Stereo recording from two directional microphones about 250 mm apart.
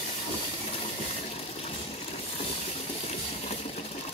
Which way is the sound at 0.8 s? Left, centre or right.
Left.